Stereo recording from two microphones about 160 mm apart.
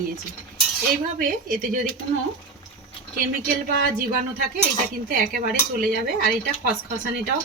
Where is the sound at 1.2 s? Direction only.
60° right (ahead or behind).